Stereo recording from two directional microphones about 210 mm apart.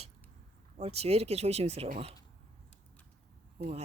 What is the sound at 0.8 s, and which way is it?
Speech, 30° right (ahead or behind).